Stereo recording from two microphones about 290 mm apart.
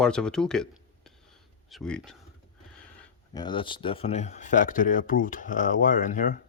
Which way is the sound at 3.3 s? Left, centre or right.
Centre.